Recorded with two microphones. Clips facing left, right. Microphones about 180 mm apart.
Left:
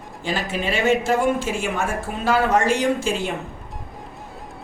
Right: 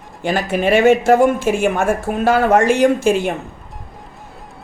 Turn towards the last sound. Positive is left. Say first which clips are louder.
# right 8 dB
turn(degrees=-55)  # may be behind; listen again after turning